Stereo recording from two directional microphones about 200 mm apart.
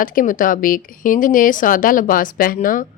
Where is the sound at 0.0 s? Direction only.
45° left (ahead or behind).